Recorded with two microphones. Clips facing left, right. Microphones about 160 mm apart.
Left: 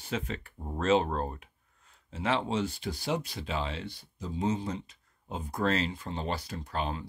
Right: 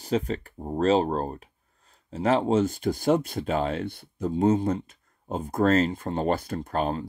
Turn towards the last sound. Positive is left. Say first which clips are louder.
# right 7 dB
turn(degrees=-45)  # may be behind; listen again after turning